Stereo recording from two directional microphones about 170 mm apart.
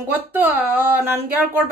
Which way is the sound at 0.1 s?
10° right (ahead or behind).